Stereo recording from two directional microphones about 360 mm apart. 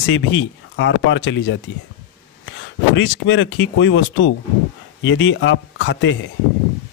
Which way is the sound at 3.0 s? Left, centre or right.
Left.